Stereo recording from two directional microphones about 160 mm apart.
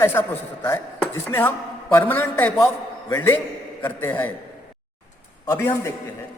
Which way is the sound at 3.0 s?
20° left (ahead or behind).